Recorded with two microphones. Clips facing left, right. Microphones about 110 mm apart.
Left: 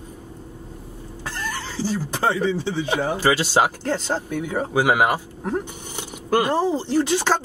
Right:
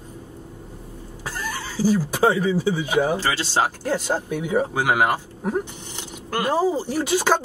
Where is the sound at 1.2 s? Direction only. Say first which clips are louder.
Even; 10° right (ahead or behind).